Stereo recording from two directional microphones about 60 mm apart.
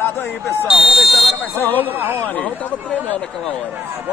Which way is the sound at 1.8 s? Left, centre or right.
Right.